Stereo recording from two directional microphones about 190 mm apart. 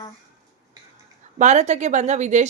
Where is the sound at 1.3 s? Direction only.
40° right (ahead or behind).